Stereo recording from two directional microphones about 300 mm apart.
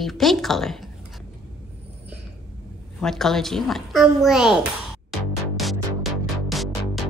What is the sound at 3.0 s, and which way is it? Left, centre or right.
A child's voice, centre.